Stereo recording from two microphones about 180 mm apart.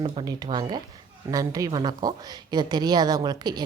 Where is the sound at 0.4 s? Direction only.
20° right (ahead or behind).